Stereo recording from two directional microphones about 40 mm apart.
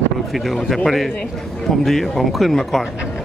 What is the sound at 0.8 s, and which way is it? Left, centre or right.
Speech, centre.